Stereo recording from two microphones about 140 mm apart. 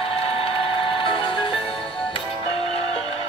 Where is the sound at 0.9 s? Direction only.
40° left (ahead or behind).